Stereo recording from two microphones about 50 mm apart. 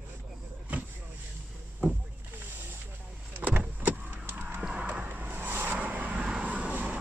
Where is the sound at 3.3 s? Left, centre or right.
Right.